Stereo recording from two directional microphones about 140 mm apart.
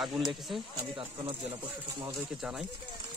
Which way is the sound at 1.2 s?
40° right (ahead or behind).